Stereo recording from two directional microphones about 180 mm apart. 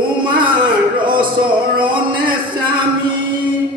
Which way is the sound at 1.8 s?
25° right (ahead or behind).